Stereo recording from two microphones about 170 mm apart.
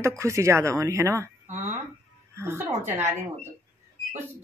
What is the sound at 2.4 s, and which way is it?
Speech, 15° right (ahead or behind).